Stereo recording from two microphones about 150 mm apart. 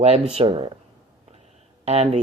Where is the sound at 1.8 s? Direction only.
40° right (ahead or behind).